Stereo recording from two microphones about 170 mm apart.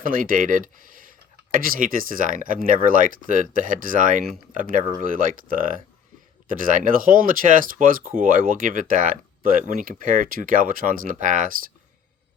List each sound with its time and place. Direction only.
0.0 s speech: 55° right (ahead or behind)